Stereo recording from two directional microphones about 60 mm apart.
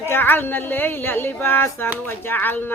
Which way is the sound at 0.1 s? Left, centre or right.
Left.